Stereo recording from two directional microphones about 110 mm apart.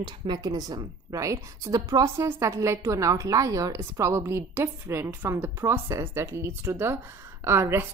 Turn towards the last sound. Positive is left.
turn(degrees=-20)  # may be behind; listen again after turning